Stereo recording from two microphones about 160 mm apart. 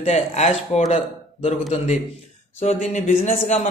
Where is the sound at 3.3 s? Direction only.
50° left (ahead or behind).